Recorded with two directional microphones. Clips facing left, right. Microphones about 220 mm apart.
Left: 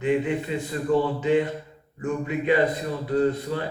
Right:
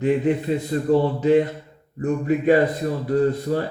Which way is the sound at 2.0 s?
45° right (ahead or behind).